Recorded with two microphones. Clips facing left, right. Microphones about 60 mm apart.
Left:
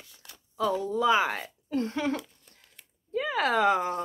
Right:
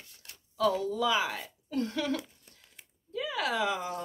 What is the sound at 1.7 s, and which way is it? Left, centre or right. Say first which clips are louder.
Speech: left 2 dB; left.